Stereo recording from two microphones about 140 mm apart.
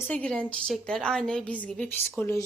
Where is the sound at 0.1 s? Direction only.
5° left (ahead or behind).